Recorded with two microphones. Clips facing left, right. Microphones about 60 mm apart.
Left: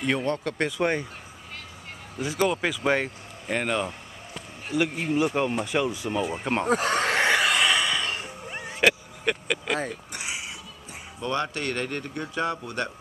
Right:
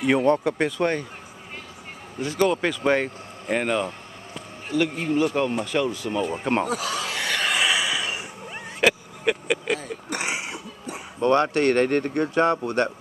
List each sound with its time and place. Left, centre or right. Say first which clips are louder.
0.0 s speech: right 6 dB; centre
0.6 s speech: right 2 dB; centre
2.1 s speech: right 3 dB; centre
6.1 s speech: right 4 dB; centre
6.6 s a sound: left 3 dB; left
7.4 s a sound: even; centre
8.5 s vehicle: right 1 dB; centre
10.0 s a sound: right 6 dB; right
11.1 s speech: right 9 dB; right